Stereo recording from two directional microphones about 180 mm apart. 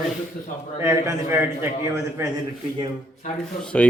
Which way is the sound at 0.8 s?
15° right (ahead or behind).